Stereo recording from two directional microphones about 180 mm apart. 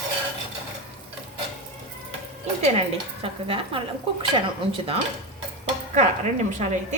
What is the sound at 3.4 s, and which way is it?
Speech, 30° right (ahead or behind).